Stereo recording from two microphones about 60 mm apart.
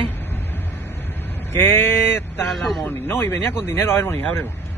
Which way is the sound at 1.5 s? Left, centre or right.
Left.